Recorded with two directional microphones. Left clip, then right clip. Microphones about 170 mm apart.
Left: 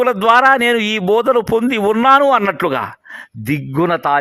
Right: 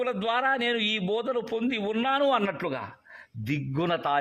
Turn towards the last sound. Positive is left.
turn(degrees=30)  # may be behind; listen again after turning